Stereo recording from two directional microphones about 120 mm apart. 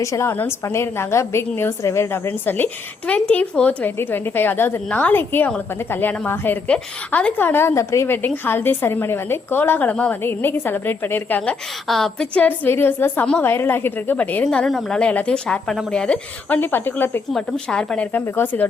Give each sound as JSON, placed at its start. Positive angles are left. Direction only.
{"t": 0.0, "sound": "a woman's voice", "side_deg": 25}
{"t": 11.9, "sound": "a woman's voice", "side_deg": 5}
{"t": 17.3, "sound": "a woman's voice", "side_deg": 5}